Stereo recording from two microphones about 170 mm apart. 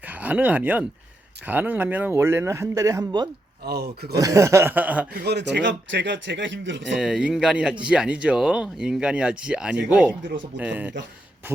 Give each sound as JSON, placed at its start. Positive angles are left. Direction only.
{"t": 0.0, "sound": "speech", "side_deg": -10}
{"t": 3.7, "sound": "speech", "side_deg": -70}
{"t": 4.1, "sound": "speech", "side_deg": -20}
{"t": 5.2, "sound": "speech", "side_deg": -80}
{"t": 6.9, "sound": "speech", "side_deg": -5}